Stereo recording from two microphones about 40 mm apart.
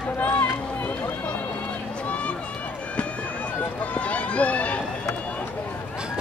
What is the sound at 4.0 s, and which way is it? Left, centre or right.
Run, left.